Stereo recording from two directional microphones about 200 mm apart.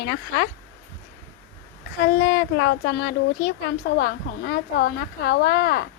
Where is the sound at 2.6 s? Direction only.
60° left (ahead or behind).